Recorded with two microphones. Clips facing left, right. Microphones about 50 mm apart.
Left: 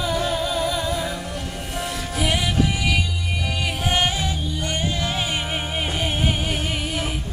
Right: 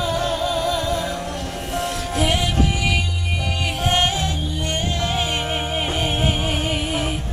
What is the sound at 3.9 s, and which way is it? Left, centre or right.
Music, centre.